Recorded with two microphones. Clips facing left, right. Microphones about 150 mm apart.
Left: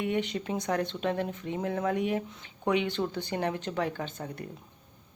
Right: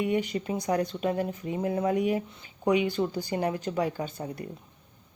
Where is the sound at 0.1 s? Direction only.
5° right (ahead or behind).